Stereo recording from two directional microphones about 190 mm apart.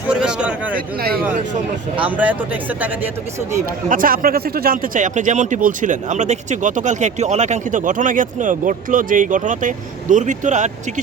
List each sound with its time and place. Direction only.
0.1 s a sound: 5° right (ahead or behind)
1.0 s speech: 45° right (ahead or behind)
2.0 s speech: 10° right (ahead or behind)
3.8 s speech: 45° right (ahead or behind)